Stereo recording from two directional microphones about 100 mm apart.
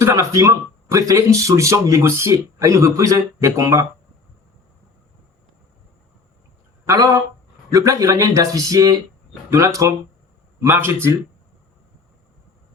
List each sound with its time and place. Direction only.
0.0 s speech: 30° right (ahead or behind)
6.8 s speech: 35° right (ahead or behind)